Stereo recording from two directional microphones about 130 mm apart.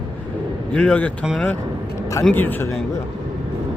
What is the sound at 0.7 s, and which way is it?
Speech, 10° left (ahead or behind).